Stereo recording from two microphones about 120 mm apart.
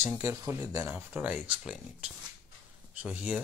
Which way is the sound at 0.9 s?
10° right (ahead or behind).